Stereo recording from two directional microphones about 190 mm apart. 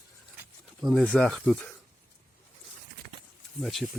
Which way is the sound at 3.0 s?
45° right (ahead or behind).